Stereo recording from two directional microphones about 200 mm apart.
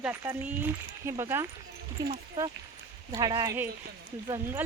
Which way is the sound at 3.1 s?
20° right (ahead or behind).